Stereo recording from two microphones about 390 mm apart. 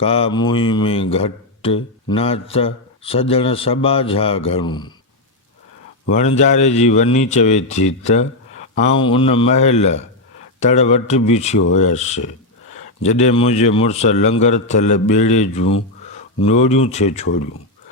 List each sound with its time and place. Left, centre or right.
0.0 s speech: centre
6.1 s speech: centre